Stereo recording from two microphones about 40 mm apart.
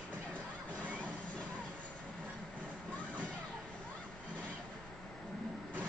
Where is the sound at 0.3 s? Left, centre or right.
Left.